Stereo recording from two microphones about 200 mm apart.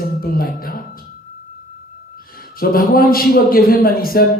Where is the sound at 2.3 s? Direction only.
50° left (ahead or behind).